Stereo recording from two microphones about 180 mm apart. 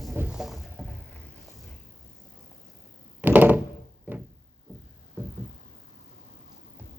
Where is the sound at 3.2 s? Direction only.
10° right (ahead or behind).